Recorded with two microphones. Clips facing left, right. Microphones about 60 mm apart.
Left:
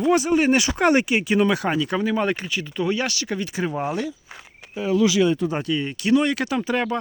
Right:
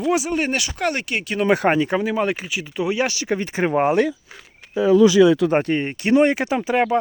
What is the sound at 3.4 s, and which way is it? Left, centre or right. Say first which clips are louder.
Speech: right 3 dB; right.